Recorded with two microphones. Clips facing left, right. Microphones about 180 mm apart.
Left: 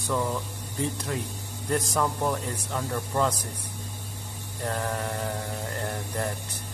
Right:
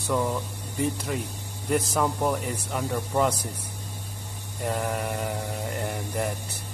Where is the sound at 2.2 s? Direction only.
15° right (ahead or behind).